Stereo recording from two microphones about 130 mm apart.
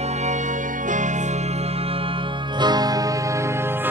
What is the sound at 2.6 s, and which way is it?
Music, 30° right (ahead or behind).